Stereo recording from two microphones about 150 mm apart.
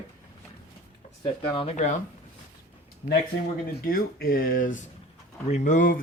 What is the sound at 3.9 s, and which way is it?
Speech, 75° left (ahead or behind).